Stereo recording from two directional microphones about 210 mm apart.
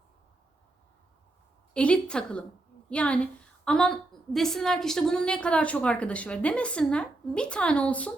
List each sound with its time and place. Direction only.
1.7 s a woman's voice: 5° left (ahead or behind)